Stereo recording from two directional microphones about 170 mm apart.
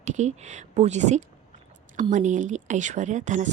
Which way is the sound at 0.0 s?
45° right (ahead or behind).